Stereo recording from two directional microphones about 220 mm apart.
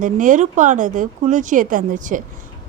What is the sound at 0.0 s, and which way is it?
Speech, 35° right (ahead or behind).